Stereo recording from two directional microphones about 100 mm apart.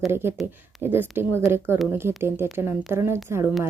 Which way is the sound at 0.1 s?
25° right (ahead or behind).